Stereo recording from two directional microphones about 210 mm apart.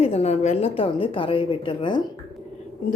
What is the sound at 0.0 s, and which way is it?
A woman's voice, 30° left (ahead or behind).